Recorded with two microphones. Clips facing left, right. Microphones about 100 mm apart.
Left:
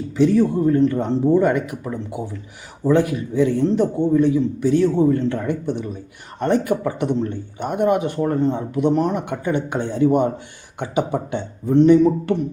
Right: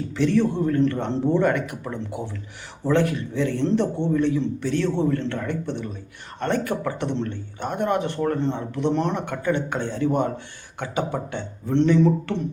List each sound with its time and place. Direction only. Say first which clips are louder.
0.1 s speech: left 5 dB; 5° left (ahead or behind)